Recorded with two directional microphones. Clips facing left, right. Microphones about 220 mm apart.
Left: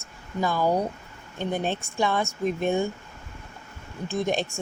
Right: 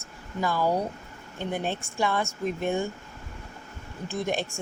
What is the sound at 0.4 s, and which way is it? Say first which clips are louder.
Speech: left 2 dB; 15° left (ahead or behind).